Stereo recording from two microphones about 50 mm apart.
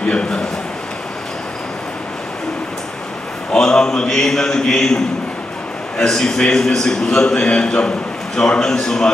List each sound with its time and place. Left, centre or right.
0.1 s a man's voice: centre
3.5 s a man's voice: centre